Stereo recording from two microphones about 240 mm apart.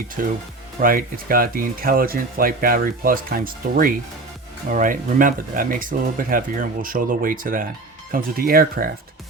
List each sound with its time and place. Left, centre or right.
0.2 s speech: right